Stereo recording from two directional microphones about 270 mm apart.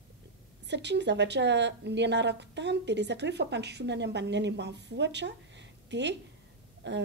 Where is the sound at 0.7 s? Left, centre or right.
Right.